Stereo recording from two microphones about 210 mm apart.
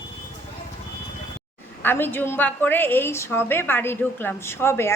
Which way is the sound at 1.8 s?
10° left (ahead or behind).